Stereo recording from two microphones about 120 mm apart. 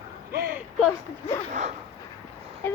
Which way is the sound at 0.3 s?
20° right (ahead or behind).